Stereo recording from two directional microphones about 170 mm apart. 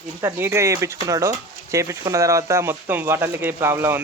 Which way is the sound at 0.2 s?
15° right (ahead or behind).